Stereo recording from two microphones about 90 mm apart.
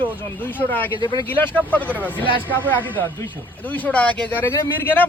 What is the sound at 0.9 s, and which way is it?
Speech, 60° left (ahead or behind).